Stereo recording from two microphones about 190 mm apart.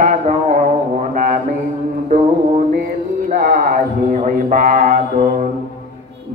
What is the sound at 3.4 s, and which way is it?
Mantra, 40° right (ahead or behind).